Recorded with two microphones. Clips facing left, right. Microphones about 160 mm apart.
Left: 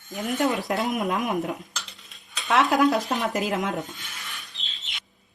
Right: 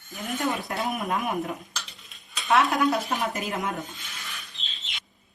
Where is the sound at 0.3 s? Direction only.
80° left.